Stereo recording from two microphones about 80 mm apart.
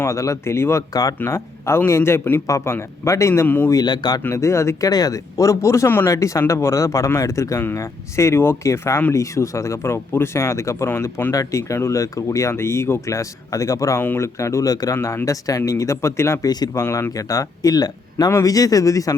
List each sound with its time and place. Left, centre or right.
0.0 s speech: left
3.4 s speech: left
3.7 s a man's voice: left
4.2 s speech: left
4.9 s speech: left
10.9 s speech: left
11.3 s speech: left
14.0 s speech: left
14.3 s speech: left
16.4 s a man's voice: left
16.7 s speech: left
18.3 s speech: left